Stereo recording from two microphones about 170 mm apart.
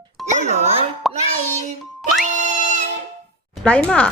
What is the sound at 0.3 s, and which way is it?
Music, 40° right (ahead or behind).